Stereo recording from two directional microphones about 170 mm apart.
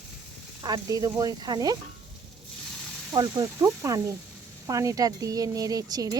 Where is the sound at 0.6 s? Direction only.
20° right (ahead or behind).